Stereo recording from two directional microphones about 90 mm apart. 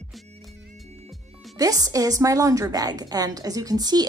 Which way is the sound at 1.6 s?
40° right (ahead or behind).